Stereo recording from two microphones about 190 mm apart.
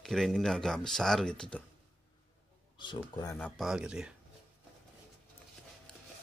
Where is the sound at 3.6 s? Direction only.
5° right (ahead or behind).